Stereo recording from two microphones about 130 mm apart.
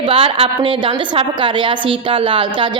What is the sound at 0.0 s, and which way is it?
A woman's voice, 45° right (ahead or behind).